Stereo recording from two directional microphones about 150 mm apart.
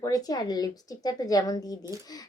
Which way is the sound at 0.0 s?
25° left (ahead or behind).